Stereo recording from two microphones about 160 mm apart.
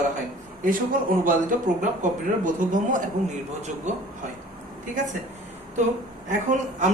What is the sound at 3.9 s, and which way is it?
Speech, 45° right (ahead or behind).